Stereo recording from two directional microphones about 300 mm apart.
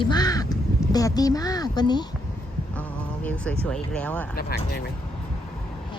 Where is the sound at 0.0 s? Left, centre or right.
Centre.